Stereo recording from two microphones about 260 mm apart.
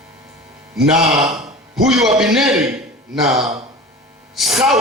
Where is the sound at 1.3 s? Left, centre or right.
Centre.